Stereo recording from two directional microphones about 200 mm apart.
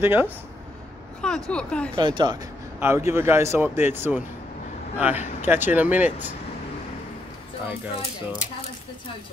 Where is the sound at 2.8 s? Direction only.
10° right (ahead or behind).